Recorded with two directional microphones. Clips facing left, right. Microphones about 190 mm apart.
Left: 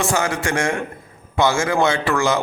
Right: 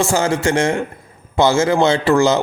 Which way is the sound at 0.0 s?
25° right (ahead or behind).